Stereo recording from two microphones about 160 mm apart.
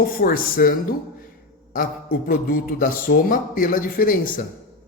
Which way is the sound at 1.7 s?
65° left (ahead or behind).